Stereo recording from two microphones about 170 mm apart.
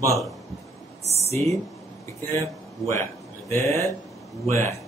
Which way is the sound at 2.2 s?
15° left (ahead or behind).